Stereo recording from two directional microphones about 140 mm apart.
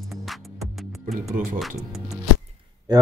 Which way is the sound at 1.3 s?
70° right (ahead or behind).